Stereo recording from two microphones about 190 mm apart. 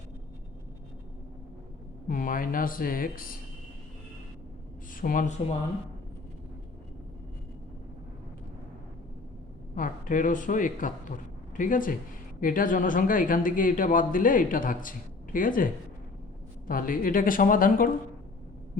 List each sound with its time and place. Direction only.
2.0 s speech: 45° left (ahead or behind)
4.9 s speech: 45° left (ahead or behind)
9.7 s speech: 45° left (ahead or behind)